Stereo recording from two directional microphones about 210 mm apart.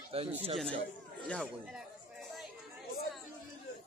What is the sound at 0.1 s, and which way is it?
Speech, 30° right (ahead or behind).